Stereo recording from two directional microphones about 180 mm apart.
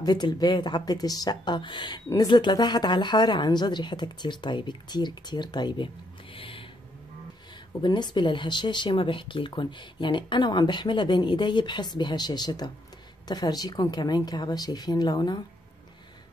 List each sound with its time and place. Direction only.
0.0 s speech: 25° left (ahead or behind)
6.3 s a sound: 30° left (ahead or behind)
7.8 s speech: 25° left (ahead or behind)